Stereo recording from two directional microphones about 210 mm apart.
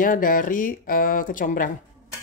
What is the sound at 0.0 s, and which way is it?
Speech, 40° left (ahead or behind).